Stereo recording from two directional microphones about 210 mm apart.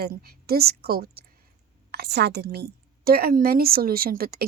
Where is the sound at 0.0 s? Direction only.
45° right (ahead or behind).